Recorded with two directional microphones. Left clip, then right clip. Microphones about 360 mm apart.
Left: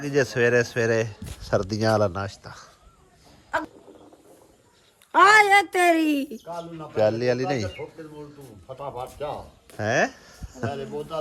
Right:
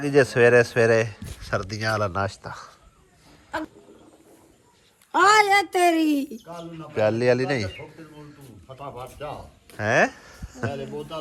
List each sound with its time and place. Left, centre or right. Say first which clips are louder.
0.0 s speech: right 4 dB; centre
5.1 s a child's voice: left 2 dB; centre
6.4 s speech: left 3 dB; left
6.9 s speech: right 1 dB; centre
8.6 s speech: left 3 dB; left
9.6 s speech: right 3 dB; centre